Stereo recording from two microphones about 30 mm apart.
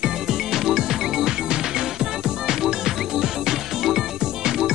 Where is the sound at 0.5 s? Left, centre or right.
Centre.